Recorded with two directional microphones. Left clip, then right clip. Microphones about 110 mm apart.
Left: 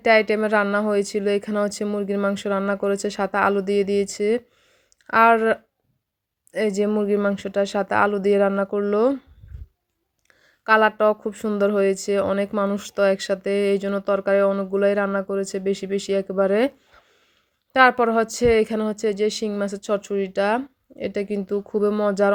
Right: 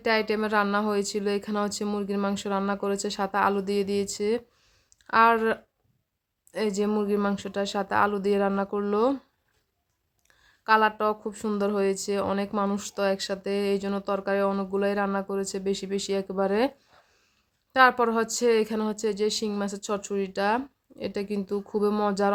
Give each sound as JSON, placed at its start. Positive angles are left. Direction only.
{"t": 0.0, "sound": "speech", "side_deg": 30}
{"t": 6.9, "sound": "speech", "side_deg": 15}
{"t": 7.3, "sound": "speech", "side_deg": 25}
{"t": 10.6, "sound": "speech", "side_deg": 25}
{"t": 12.5, "sound": "speech", "side_deg": 10}
{"t": 12.7, "sound": "speech", "side_deg": 25}
{"t": 17.7, "sound": "speech", "side_deg": 25}